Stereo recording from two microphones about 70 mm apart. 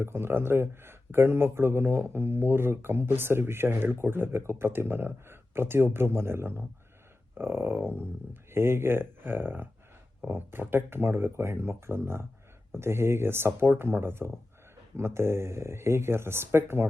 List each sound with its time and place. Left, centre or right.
0.0 s speech: right